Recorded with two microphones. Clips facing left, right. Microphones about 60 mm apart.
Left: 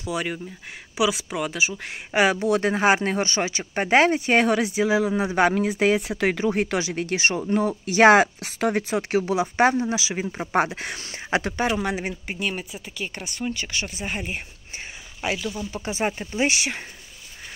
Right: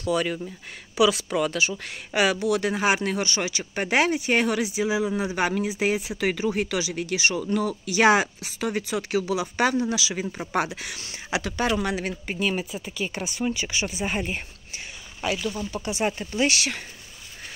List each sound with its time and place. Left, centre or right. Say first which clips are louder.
0.0 s speech: right 3 dB; centre
2.1 s speech: left 2 dB; left
11.6 s speech: left 1 dB; centre
12.1 s speech: right 2 dB; centre
15.5 s speech: even; centre
15.9 s speech: left 1 dB; left
16.2 s speech: even; left